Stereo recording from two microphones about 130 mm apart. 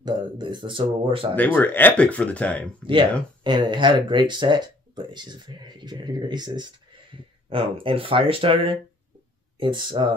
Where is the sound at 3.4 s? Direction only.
35° right (ahead or behind).